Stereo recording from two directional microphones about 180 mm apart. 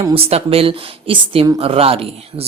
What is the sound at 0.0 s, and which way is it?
Speech, 30° right (ahead or behind).